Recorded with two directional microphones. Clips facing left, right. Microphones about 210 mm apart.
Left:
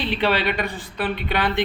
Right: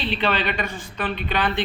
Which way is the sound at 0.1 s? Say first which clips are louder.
Left 3 dB; 10° left (ahead or behind).